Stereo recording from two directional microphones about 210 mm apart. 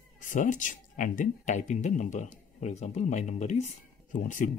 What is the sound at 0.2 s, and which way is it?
Speech, 35° left (ahead or behind).